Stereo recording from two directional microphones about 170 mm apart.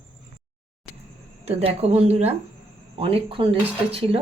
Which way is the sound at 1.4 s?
40° right (ahead or behind).